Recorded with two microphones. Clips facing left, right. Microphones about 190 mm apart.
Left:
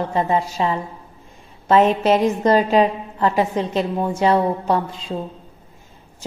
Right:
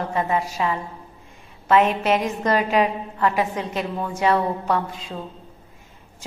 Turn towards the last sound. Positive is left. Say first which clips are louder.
# left 3 dB
turn(degrees=30)  # may be behind; listen again after turning